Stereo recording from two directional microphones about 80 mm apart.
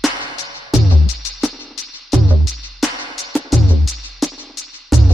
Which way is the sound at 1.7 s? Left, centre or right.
Centre.